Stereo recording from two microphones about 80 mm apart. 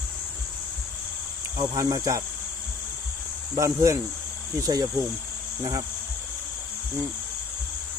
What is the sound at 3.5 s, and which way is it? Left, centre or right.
Speech, right.